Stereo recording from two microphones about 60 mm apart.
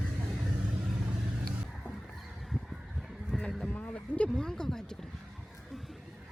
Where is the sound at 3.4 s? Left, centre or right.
Centre.